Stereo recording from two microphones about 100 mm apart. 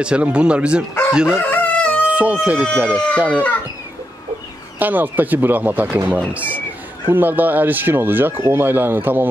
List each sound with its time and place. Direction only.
0.0 s speech: 10° right (ahead or behind)
1.4 s crowing: 15° left (ahead or behind)
2.0 s speech: 15° right (ahead or behind)
4.7 s speech: 20° right (ahead or behind)